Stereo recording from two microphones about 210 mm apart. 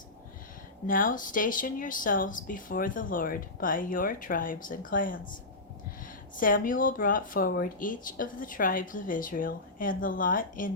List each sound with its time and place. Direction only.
0.9 s speech: 40° left (ahead or behind)
6.3 s speech: 40° left (ahead or behind)